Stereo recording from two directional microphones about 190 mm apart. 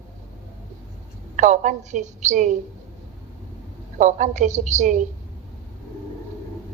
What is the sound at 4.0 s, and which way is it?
A woman's voice, 40° right (ahead or behind).